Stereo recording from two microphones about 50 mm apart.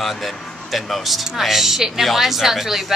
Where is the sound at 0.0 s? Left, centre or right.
Centre.